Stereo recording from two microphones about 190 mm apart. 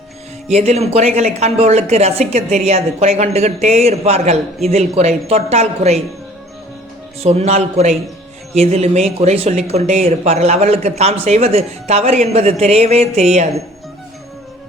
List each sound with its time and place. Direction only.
0.4 s speech: 35° right (ahead or behind)
7.2 s speech: 35° right (ahead or behind)